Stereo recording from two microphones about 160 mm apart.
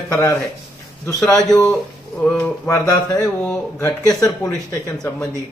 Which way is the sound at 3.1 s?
5° left (ahead or behind).